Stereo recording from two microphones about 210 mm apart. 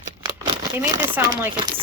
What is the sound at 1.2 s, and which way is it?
Speech, 10° right (ahead or behind).